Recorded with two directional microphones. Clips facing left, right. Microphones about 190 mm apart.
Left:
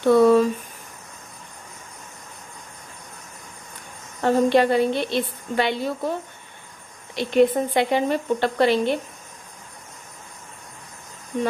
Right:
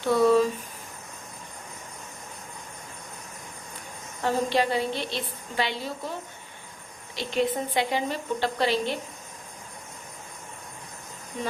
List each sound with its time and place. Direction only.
0.0 s speech: 55° left (ahead or behind)
4.2 s a woman's voice: 55° left (ahead or behind)
7.2 s a woman's voice: 55° left (ahead or behind)